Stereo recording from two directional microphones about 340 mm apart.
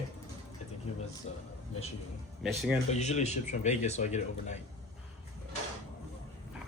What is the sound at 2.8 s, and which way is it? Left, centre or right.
Speech, centre.